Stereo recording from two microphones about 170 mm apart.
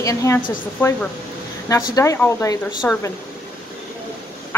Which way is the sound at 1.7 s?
20° left (ahead or behind).